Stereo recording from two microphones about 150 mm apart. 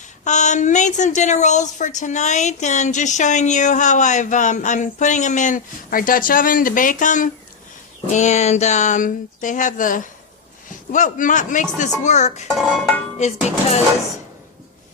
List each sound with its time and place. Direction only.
0.3 s a woman's voice: 55° left (ahead or behind)
12.0 s music: 50° left (ahead or behind)
12.5 s music: centre (ahead or behind)
13.1 s music: 50° left (ahead or behind)